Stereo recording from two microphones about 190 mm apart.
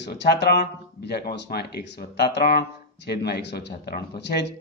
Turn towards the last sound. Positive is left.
turn(degrees=60)  # may be behind; listen again after turning